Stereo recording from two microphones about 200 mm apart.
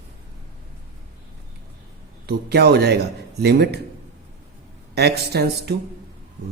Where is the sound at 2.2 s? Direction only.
55° right (ahead or behind).